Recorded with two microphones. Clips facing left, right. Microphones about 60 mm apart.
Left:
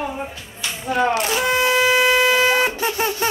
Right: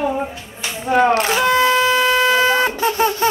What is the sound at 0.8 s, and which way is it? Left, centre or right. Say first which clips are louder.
Speech: right 5 dB; right.